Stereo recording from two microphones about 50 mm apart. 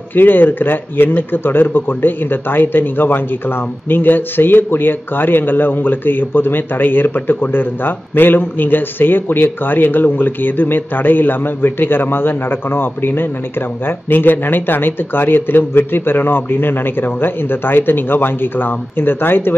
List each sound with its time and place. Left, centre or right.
0.1 s speech: left